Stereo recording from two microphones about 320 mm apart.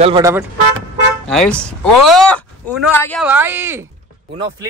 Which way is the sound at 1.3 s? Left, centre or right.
Centre.